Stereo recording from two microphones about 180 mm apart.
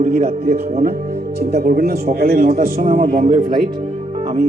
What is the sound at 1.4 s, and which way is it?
A man's voice, 60° right (ahead or behind).